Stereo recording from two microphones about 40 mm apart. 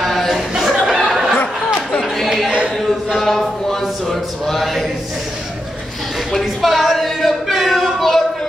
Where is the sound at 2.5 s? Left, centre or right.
Right.